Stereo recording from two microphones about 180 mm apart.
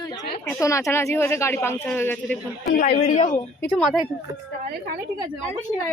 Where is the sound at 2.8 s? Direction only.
40° left (ahead or behind).